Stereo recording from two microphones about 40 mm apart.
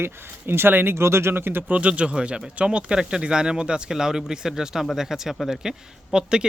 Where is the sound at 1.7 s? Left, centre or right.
Right.